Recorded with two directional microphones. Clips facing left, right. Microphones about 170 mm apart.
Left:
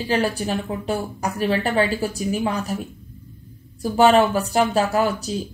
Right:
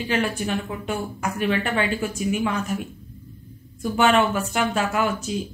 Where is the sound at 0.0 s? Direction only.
35° left (ahead or behind).